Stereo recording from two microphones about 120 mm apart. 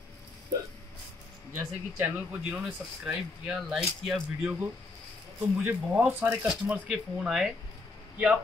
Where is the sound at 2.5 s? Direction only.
5° right (ahead or behind).